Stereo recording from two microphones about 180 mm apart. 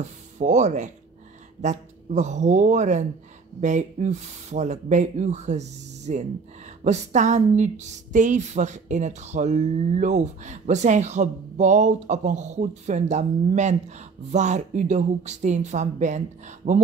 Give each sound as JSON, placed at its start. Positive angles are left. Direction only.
{"t": 0.4, "sound": "speech", "side_deg": -40}